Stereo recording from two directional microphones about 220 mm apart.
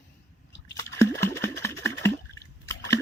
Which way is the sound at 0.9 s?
15° left (ahead or behind).